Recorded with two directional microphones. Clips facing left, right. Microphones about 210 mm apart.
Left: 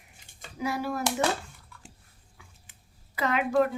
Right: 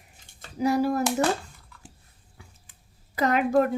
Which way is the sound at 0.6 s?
40° right (ahead or behind).